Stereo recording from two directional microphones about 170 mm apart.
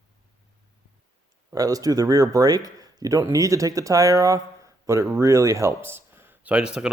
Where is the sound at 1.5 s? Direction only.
20° right (ahead or behind).